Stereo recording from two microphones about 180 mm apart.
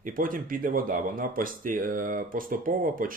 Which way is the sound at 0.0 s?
50° right (ahead or behind).